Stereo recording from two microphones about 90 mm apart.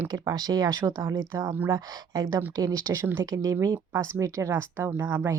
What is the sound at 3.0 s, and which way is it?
Speech, 30° right (ahead or behind).